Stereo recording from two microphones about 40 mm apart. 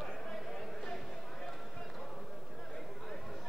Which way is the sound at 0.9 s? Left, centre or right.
Centre.